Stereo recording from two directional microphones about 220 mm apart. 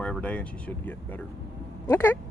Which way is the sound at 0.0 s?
5° left (ahead or behind).